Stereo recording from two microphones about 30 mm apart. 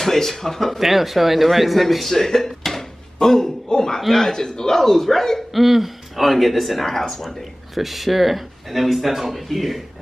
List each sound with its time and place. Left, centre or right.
0.0 s speech: centre
0.7 s a man's voice: centre; by 4.7 s left
4.7 s speech: centre
5.5 s speech: centre
7.7 s speech: centre